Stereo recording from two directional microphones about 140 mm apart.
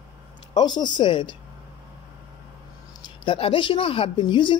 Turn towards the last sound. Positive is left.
turn(degrees=35)  # may be behind; listen again after turning